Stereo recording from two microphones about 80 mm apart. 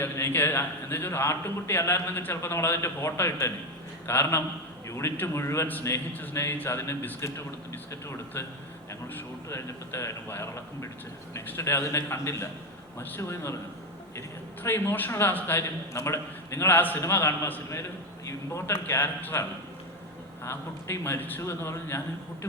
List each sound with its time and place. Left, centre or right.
0.0 s a man's voice: left
16.6 s a man's voice: left
20.4 s a man's voice: left